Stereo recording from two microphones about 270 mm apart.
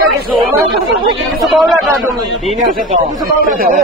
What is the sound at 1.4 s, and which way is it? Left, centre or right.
Speech, centre.